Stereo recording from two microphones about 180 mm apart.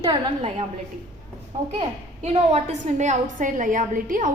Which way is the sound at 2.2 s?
35° right (ahead or behind).